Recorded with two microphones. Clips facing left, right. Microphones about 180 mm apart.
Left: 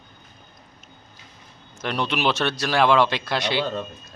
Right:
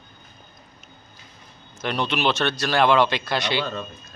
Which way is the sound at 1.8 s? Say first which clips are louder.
Even; centre (ahead or behind).